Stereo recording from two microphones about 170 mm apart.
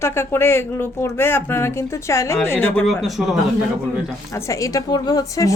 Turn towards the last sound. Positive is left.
turn(degrees=20)  # may be behind; listen again after turning